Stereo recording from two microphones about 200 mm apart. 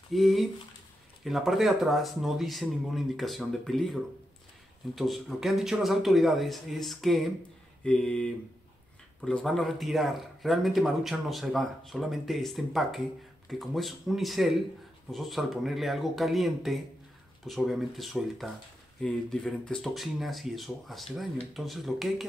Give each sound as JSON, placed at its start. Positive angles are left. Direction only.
{"t": 0.1, "sound": "speech", "side_deg": 0}